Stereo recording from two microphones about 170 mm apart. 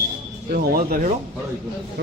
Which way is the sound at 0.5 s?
60° right (ahead or behind).